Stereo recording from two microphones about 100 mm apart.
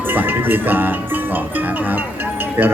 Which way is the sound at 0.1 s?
20° right (ahead or behind).